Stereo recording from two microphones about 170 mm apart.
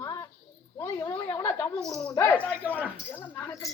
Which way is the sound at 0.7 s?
20° left (ahead or behind).